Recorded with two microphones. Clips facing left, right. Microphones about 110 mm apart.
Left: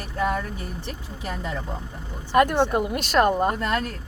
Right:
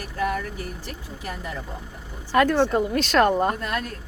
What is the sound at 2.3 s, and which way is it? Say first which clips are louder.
Speech: even; 15° left (ahead or behind).